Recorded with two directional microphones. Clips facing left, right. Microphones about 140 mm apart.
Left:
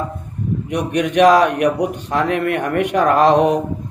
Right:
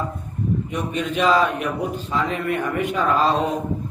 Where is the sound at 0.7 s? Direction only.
75° left (ahead or behind).